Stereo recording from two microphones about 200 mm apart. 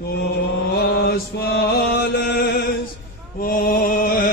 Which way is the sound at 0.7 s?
50° left (ahead or behind).